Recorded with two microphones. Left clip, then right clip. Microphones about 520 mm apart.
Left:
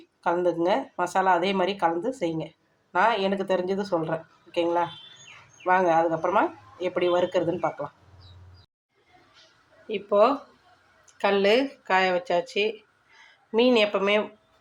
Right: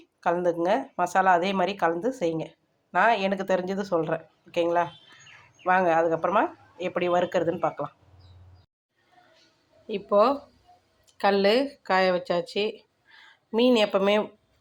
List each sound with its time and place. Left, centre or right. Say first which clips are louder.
0.2 s speech: even; right
9.8 s speech: left 1 dB; right